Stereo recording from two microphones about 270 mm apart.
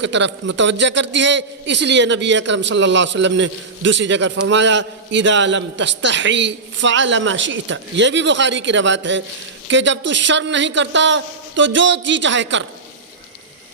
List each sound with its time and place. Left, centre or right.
0.0 s a man's voice: right